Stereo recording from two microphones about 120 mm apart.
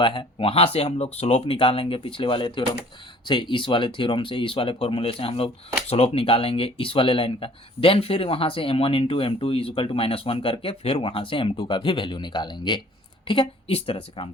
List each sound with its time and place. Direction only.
0.0 s speech: 40° left (ahead or behind)